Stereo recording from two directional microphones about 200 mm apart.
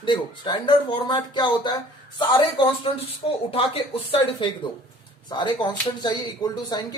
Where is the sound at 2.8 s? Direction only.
30° left (ahead or behind).